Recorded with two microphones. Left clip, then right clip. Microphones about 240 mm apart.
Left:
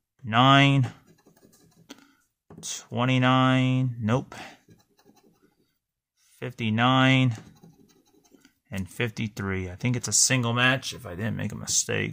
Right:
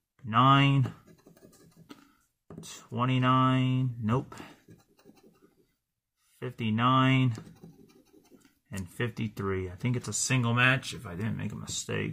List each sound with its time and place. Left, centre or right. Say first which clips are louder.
0.3 s speech: left 4 dB; left
2.6 s speech: left 4 dB; left
6.4 s speech: left 4 dB; left
8.4 s speech: left 6 dB; left